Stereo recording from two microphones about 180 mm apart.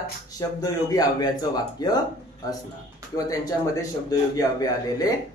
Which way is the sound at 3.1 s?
20° left (ahead or behind).